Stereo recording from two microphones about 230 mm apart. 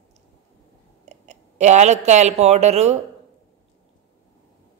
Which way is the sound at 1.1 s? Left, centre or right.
Right.